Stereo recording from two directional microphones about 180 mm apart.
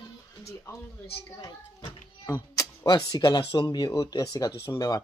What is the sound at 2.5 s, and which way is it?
Speech, 25° left (ahead or behind).